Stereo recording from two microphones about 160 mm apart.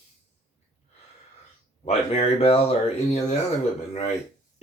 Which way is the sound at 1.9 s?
40° left (ahead or behind).